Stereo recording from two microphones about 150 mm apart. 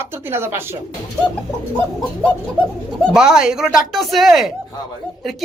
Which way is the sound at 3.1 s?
5° right (ahead or behind).